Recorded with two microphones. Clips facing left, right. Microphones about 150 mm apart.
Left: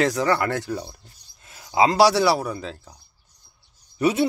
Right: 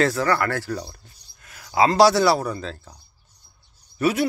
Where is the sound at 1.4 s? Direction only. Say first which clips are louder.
Even; 25° left (ahead or behind).